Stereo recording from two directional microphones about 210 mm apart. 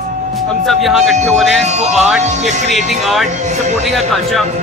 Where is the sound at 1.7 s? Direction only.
35° right (ahead or behind).